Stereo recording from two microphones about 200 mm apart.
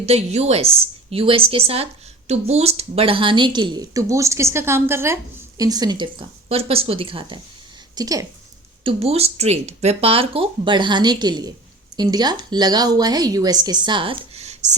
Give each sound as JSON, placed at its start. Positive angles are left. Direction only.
{"t": 0.0, "sound": "a woman's voice", "side_deg": -30}
{"t": 8.8, "sound": "a woman's voice", "side_deg": -30}